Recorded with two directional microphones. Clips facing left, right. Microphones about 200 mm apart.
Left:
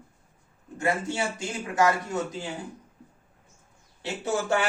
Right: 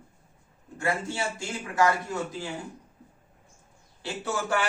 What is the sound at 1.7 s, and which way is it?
Speech, 20° left (ahead or behind).